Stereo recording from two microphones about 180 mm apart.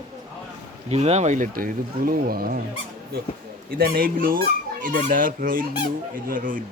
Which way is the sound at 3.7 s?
55° right (ahead or behind).